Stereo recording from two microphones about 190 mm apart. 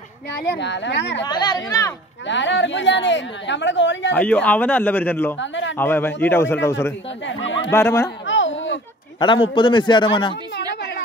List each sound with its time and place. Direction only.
0.3 s a woman's voice: 65° left (ahead or behind)
1.2 s speech: 20° left (ahead or behind)
2.2 s a woman's voice: 70° left (ahead or behind)
4.1 s speech: 5° left (ahead or behind)
5.4 s speech: 75° left (ahead or behind)
5.8 s speech: 10° left (ahead or behind)
7.2 s a woman's voice: 75° left (ahead or behind)
7.7 s speech: 15° left (ahead or behind)
8.3 s a sound: 80° left
9.5 s speech: 25° left (ahead or behind)
10.5 s a sound: 60° left (ahead or behind)